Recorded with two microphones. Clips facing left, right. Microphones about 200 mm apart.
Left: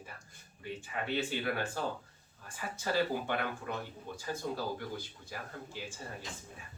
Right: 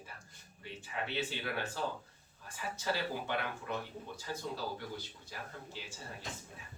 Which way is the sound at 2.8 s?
50° left (ahead or behind).